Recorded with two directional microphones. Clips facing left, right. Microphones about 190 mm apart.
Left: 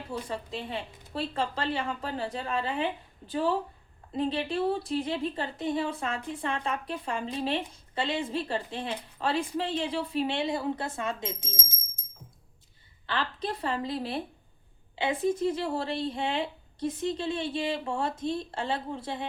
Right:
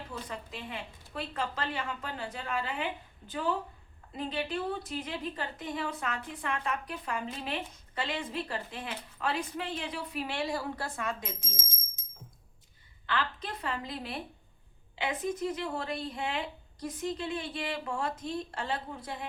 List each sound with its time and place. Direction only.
0.1 s speech: 30° left (ahead or behind)
13.1 s speech: 30° left (ahead or behind)